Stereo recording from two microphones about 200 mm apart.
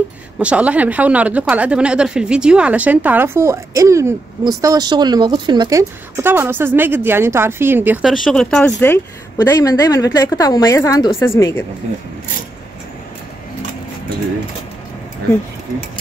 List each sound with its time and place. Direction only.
0.4 s a woman's voice: 5° right (ahead or behind); by 11.6 s 15° left (ahead or behind)